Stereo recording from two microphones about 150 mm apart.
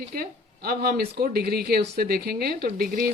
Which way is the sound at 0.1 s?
85° right.